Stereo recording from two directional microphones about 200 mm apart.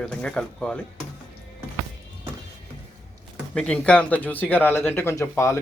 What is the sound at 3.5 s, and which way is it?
Speech, 5° left (ahead or behind).